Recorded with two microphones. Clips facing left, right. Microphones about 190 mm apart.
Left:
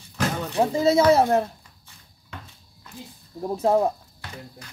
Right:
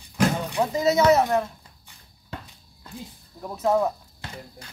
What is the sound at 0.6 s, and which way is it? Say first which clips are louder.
Speech: left 3 dB; 30° left (ahead or behind).